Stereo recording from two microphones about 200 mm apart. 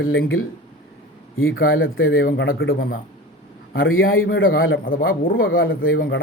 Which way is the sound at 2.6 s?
45° left (ahead or behind).